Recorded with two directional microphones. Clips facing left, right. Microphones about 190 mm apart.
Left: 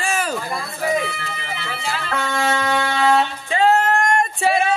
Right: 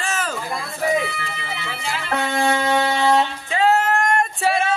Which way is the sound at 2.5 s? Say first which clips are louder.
Right 1 dB; 25° right (ahead or behind).